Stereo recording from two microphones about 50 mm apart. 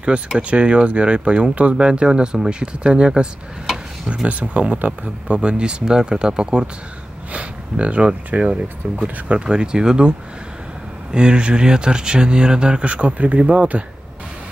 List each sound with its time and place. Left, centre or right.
0.4 s speech: right